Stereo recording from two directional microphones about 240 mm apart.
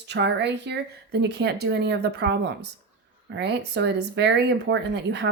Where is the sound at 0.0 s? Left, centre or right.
Right.